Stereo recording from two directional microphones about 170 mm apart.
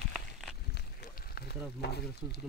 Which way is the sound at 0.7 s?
65° left (ahead or behind).